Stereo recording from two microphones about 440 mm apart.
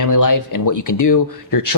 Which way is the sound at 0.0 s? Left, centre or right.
Left.